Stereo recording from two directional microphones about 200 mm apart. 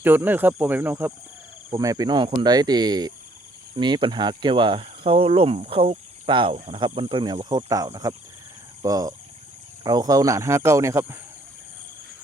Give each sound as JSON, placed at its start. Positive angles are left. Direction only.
{"t": 0.0, "sound": "speech", "side_deg": -10}